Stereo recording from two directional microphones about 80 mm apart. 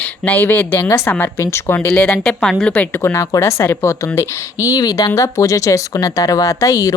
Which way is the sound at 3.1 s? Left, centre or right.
Left.